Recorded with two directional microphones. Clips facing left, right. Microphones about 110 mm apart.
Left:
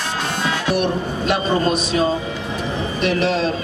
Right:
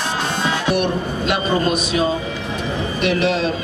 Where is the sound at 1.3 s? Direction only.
35° left (ahead or behind).